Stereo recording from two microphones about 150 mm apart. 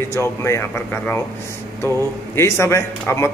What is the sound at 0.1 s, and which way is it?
Speech, 20° left (ahead or behind).